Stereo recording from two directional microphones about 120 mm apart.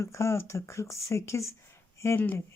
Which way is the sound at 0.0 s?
25° left (ahead or behind).